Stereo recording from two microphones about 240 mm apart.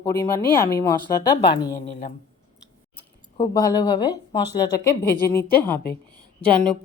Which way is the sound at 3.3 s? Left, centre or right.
Centre.